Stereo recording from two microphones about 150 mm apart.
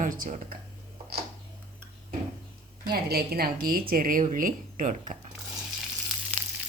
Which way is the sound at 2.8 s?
90° right.